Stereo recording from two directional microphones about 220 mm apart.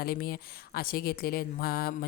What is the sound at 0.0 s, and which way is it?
A woman's voice, 45° left (ahead or behind).